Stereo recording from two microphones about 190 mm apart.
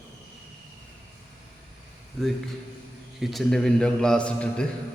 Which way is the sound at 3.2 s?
Centre (ahead or behind).